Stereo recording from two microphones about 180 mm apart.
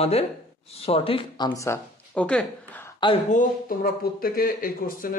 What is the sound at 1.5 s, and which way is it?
Speech, 15° left (ahead or behind).